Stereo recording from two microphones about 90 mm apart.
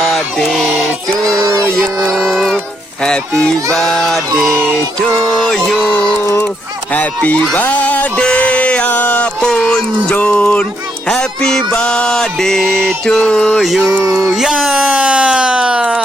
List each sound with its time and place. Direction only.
0.0 s a sound: 5° left (ahead or behind)
1.3 s a sound: 40° right (ahead or behind)
1.7 s speech: centre (ahead or behind)
2.1 s music: centre (ahead or behind)
3.0 s speech: 10° left (ahead or behind)
6.9 s mantra: 15° left (ahead or behind)
7.5 s music: 15° left (ahead or behind)
10.2 s mantra: 15° left (ahead or behind)
13.7 s speech: centre (ahead or behind)
14.0 s a sound: 35° right (ahead or behind)
14.3 s speech: 5° right (ahead or behind)